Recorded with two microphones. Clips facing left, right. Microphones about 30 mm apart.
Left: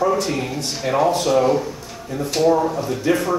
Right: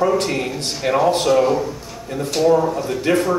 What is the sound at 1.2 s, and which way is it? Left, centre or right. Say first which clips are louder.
Speech: right 1 dB; centre.